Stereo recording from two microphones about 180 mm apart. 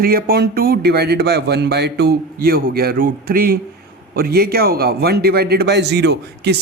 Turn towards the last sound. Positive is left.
turn(degrees=-70)  # may be behind; listen again after turning